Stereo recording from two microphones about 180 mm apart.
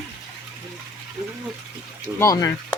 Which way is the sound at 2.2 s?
20° left (ahead or behind).